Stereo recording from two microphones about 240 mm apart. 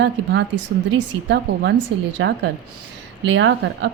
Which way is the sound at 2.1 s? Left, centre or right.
Right.